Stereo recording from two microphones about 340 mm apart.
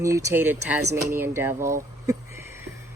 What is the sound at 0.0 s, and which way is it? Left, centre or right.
Speech, centre.